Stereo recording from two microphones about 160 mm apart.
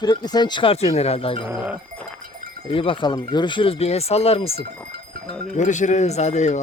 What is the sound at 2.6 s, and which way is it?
Speech, 35° left (ahead or behind).